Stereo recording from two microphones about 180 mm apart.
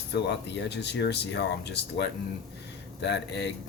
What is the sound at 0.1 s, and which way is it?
Speech, 70° left (ahead or behind).